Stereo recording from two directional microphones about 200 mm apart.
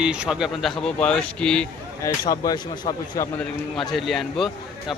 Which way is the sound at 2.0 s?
20° left (ahead or behind).